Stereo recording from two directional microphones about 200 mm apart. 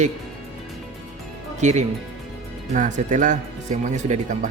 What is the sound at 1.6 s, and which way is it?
Speech, 35° right (ahead or behind).